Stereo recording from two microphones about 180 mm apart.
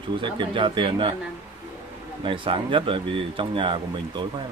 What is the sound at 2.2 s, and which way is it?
Speech, 30° right (ahead or behind).